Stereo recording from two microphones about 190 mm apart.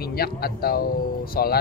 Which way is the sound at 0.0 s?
55° left (ahead or behind).